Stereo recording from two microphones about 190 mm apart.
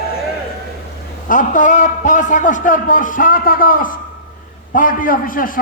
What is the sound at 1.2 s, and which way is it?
A man's voice, 45° left (ahead or behind).